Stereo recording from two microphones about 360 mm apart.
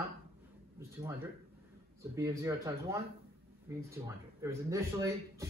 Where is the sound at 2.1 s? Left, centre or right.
Centre.